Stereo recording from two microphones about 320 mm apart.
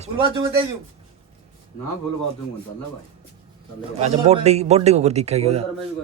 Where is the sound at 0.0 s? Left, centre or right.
Centre.